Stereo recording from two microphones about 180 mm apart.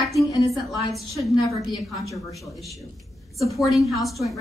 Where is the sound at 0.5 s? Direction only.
Centre (ahead or behind).